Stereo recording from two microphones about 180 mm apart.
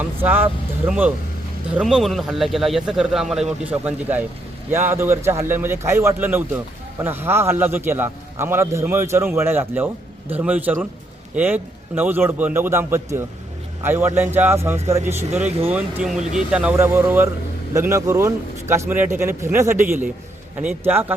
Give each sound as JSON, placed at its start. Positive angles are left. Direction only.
{"t": 0.0, "sound": "a man's voice", "side_deg": -10}